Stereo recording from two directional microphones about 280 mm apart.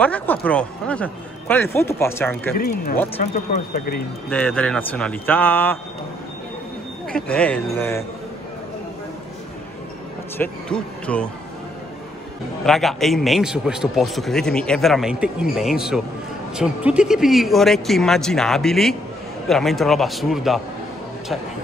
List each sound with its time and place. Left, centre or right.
0.0 s speech: centre
2.5 s speech: left
4.3 s speech: centre
7.1 s a man's voice: centre
10.3 s a man's voice: centre
12.6 s a man's voice: centre